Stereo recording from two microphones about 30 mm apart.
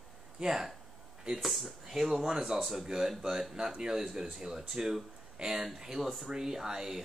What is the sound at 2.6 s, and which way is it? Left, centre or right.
Speech, centre.